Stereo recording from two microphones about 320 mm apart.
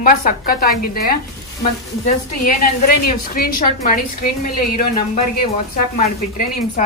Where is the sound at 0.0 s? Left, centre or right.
Left.